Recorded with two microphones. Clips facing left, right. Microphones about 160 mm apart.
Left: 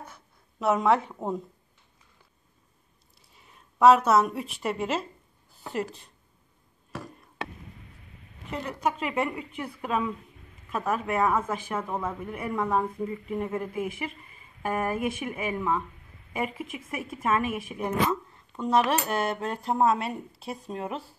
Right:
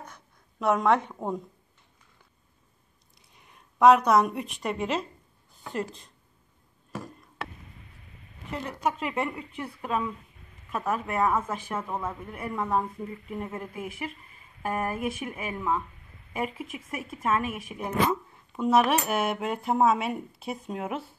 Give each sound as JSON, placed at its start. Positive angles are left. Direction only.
{"t": 0.0, "sound": "a sound", "side_deg": 5}
{"t": 3.3, "sound": "a woman's voice", "side_deg": 5}
{"t": 8.8, "sound": "speech", "side_deg": 5}